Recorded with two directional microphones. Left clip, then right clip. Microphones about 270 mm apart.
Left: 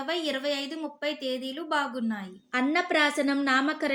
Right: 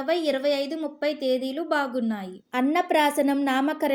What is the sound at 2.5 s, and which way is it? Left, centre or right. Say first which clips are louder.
A woman's voice: right 3 dB; right.